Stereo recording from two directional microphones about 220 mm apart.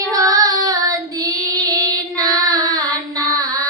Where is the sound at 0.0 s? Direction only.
15° right (ahead or behind).